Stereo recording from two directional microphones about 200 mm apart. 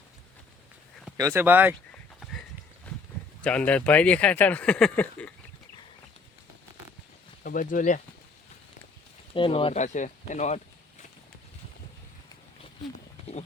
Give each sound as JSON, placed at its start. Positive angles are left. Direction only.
{"t": 1.1, "sound": "speech", "side_deg": -15}
{"t": 2.9, "sound": "a sound", "side_deg": 5}
{"t": 3.4, "sound": "speech", "side_deg": 5}
{"t": 7.4, "sound": "speech", "side_deg": 45}
{"t": 9.3, "sound": "speech", "side_deg": 25}